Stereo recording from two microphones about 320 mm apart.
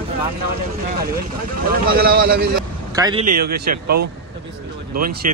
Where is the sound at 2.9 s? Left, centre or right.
Centre.